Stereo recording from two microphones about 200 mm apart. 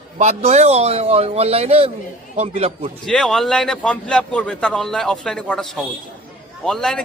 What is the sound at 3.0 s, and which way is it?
A man's voice, centre (ahead or behind).